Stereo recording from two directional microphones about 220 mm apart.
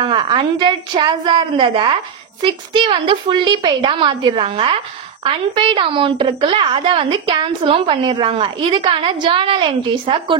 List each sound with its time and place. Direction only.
0.0 s a woman's voice: 20° right (ahead or behind)